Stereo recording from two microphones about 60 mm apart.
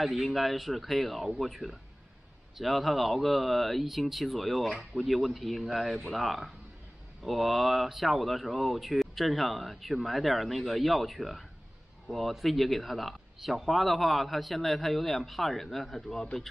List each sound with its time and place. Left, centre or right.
0.0 s speech: centre